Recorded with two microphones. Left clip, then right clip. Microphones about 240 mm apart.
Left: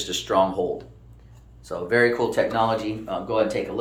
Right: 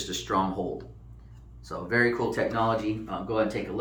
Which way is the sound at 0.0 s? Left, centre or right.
Centre.